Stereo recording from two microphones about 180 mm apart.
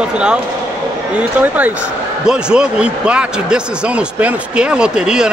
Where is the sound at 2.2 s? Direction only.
5° right (ahead or behind).